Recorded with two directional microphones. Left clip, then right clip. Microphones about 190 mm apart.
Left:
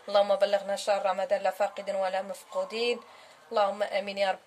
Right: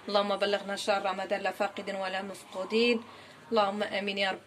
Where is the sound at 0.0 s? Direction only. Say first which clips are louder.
Left 4 dB; 60° left (ahead or behind).